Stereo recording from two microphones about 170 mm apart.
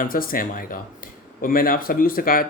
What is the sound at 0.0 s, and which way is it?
Speech, 55° left (ahead or behind).